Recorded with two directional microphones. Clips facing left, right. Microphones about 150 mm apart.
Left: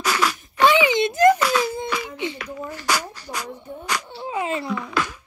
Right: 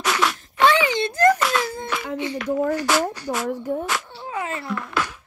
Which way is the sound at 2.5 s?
65° right (ahead or behind).